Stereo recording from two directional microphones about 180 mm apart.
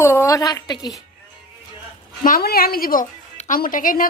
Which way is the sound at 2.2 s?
55° left (ahead or behind).